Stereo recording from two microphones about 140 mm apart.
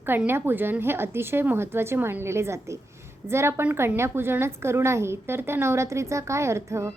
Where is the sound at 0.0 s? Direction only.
15° right (ahead or behind).